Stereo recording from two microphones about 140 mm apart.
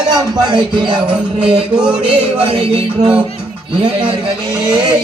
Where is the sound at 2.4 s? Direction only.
40° right (ahead or behind).